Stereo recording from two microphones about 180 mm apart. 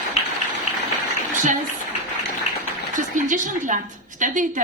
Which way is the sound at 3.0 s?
45° right (ahead or behind).